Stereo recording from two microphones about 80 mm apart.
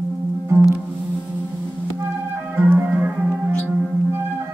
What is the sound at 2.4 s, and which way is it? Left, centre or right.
Music, right.